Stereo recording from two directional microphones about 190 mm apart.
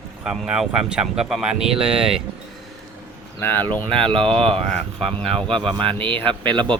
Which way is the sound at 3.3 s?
10° left (ahead or behind).